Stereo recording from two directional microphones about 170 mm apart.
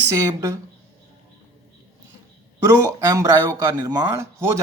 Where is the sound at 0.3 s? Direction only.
15° right (ahead or behind).